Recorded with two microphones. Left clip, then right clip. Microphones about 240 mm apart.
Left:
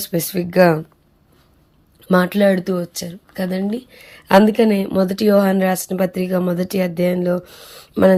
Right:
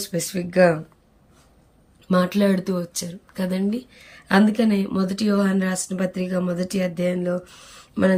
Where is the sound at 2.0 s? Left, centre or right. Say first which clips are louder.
Left 6 dB; centre.